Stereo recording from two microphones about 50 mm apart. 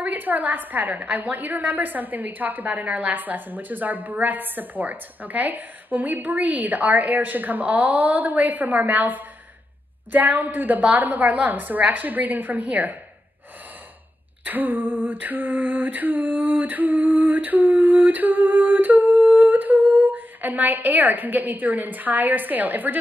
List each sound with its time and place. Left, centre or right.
0.0 s a woman's voice: right
14.4 s a woman's voice: right